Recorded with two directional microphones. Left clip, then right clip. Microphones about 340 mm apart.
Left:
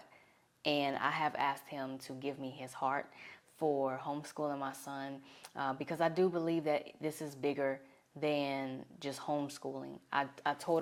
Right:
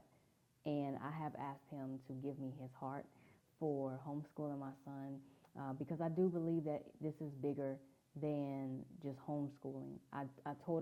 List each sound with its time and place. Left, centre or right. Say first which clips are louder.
0.6 s a woman's voice: left 10 dB; centre
9.6 s speech: left 7 dB; centre
10.1 s speech: left 14 dB; centre